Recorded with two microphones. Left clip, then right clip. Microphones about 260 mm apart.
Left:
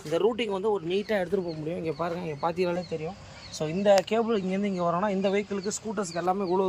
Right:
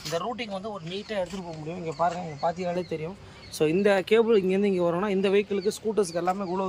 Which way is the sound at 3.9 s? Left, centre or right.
Right.